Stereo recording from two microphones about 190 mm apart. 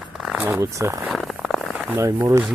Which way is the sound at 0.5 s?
15° right (ahead or behind).